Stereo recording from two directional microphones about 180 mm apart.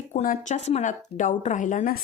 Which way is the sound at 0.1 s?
45° left (ahead or behind).